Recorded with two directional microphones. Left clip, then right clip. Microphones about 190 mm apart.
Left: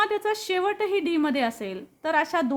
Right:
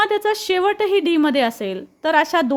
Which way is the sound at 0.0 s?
30° right (ahead or behind).